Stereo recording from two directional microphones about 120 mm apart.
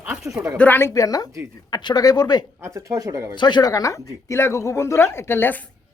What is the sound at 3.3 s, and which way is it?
Speech, 40° left (ahead or behind).